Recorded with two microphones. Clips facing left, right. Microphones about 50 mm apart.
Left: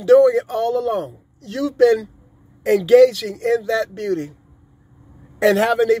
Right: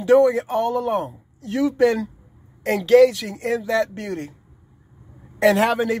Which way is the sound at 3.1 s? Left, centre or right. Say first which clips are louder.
Left 5 dB; centre.